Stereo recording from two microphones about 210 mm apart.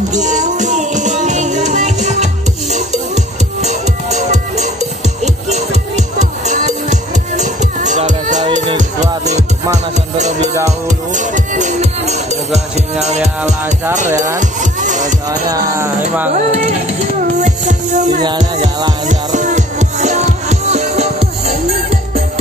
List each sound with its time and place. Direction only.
0.1 s music: 35° right (ahead or behind)
3.6 s music: 30° right (ahead or behind)
10.1 s music: 35° right (ahead or behind)
13.9 s music: 35° right (ahead or behind)
15.2 s music: 15° right (ahead or behind)
16.3 s music: 35° right (ahead or behind)